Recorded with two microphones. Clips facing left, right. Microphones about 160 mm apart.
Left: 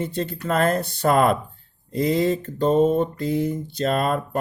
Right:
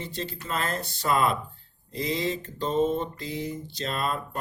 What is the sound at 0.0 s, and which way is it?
Speech, 55° left (ahead or behind).